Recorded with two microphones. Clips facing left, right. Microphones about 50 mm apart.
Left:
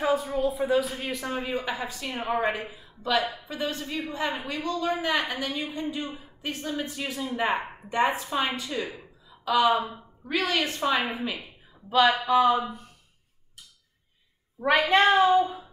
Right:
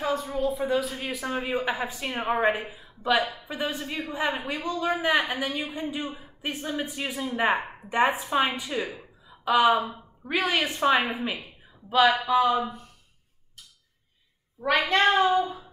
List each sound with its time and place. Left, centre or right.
0.0 s a woman's voice: centre
9.3 s a sound: right
9.7 s speech: centre
10.2 s a woman's voice: centre
11.4 s a sound: centre
12.2 s speech: centre
14.9 s a woman's voice: centre